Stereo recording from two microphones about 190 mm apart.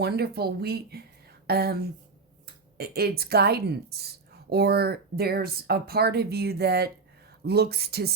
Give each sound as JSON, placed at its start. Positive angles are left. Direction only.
{"t": 0.0, "sound": "a woman's voice", "side_deg": -55}